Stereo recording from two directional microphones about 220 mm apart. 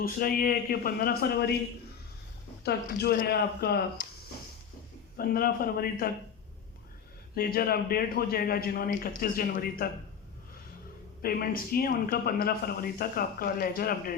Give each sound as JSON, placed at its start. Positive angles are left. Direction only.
{"t": 0.0, "sound": "a man's voice", "side_deg": 40}
{"t": 2.6, "sound": "a man's voice", "side_deg": 45}
{"t": 5.1, "sound": "a man's voice", "side_deg": 40}
{"t": 7.3, "sound": "a man's voice", "side_deg": 45}
{"t": 11.2, "sound": "a man's voice", "side_deg": 40}